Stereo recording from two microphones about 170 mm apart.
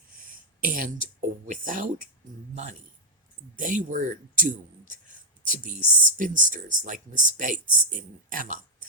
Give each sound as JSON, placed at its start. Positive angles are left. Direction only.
{"t": 0.3, "sound": "speech", "side_deg": -55}
{"t": 3.5, "sound": "speech", "side_deg": -50}